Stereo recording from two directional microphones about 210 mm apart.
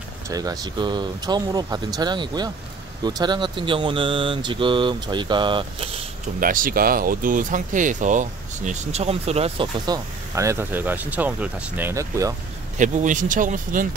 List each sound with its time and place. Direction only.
0.3 s speech: 20° right (ahead or behind)
6.4 s speech: 40° right (ahead or behind); by 12.4 s 15° right (ahead or behind)
12.7 s speech: 35° right (ahead or behind)